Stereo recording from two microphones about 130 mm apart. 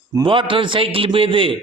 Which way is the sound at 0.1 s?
35° right (ahead or behind).